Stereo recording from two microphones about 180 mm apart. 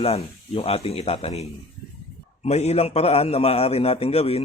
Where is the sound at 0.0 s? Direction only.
35° left (ahead or behind).